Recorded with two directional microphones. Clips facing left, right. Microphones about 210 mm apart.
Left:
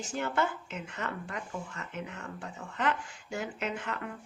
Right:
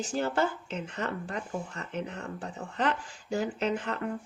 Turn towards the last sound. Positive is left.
turn(degrees=-35)  # may be behind; listen again after turning